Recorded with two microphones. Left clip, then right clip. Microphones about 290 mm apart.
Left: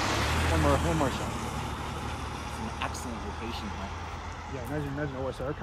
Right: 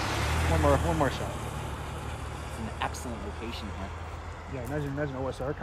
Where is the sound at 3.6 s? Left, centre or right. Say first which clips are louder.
Left 2 dB; centre.